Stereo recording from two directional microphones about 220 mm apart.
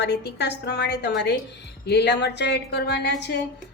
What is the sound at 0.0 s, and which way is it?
A woman's voice, 50° left (ahead or behind).